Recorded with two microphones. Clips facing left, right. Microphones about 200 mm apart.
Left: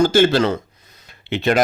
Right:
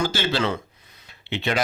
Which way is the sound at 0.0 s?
45° left (ahead or behind).